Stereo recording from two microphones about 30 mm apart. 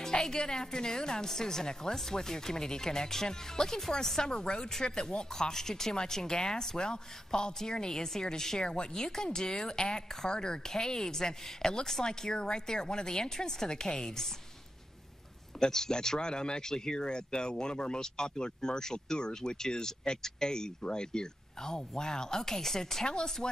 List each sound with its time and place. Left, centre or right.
0.0 s speech: left
4.2 s speech: left
5.1 s speech: left
5.5 s speech: centre
15.6 s speech: left
23.0 s speech: left